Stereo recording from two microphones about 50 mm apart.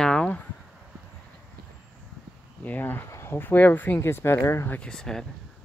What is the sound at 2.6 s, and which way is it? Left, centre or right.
Speech, left.